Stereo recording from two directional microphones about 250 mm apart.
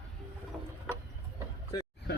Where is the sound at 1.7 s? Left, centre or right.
Centre.